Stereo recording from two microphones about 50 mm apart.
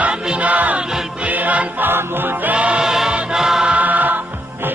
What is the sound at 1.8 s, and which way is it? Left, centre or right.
Music, right.